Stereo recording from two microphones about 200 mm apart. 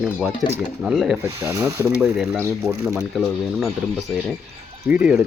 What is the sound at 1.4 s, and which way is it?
Speech, 15° right (ahead or behind).